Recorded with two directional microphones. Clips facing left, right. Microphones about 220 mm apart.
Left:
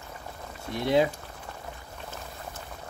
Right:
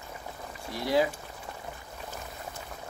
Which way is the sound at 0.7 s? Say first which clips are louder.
Left 3 dB; 25° left (ahead or behind).